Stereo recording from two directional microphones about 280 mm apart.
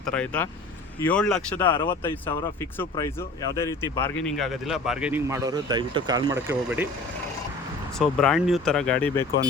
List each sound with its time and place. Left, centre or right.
0.0 s speech: centre
1.7 s speech: centre
7.9 s speech: centre